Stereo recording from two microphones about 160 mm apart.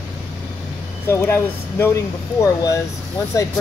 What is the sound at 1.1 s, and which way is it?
Speech, 15° left (ahead or behind).